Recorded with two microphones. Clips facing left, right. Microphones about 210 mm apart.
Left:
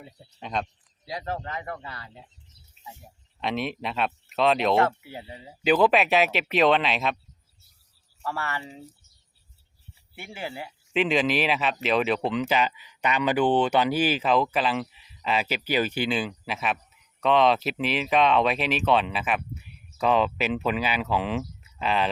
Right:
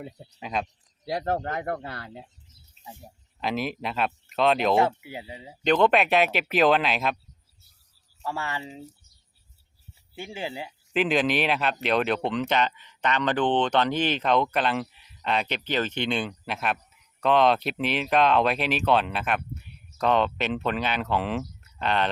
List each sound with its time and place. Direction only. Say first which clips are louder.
0.3 s speech: even; 5° right (ahead or behind)
1.0 s speech: right 5 dB; 55° right (ahead or behind)
3.4 s speech: even; centre (ahead or behind)
4.8 s speech: even; 15° right (ahead or behind)
5.6 s speech: even; 5° left (ahead or behind)
8.2 s speech: even; 15° right (ahead or behind)
10.2 s speech: right 2 dB; 15° right (ahead or behind)
10.9 s speech: even; centre (ahead or behind)